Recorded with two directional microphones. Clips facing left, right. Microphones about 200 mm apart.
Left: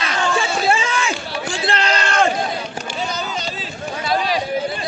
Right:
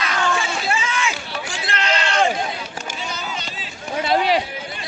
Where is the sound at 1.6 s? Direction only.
35° left (ahead or behind).